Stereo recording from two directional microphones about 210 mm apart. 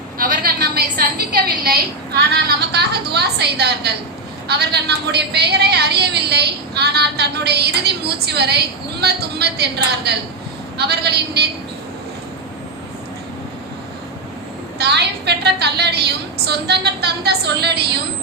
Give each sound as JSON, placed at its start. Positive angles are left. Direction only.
{"t": 0.2, "sound": "a sound", "side_deg": -40}
{"t": 0.9, "sound": "a woman's voice", "side_deg": -45}
{"t": 14.8, "sound": "a woman's voice", "side_deg": -55}